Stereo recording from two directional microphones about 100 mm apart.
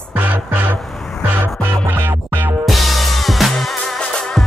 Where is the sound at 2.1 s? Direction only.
30° right (ahead or behind).